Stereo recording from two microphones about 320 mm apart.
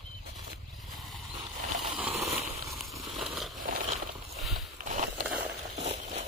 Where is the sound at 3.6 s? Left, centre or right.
Right.